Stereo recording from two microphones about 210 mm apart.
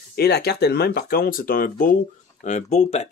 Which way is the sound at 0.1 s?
50° left (ahead or behind).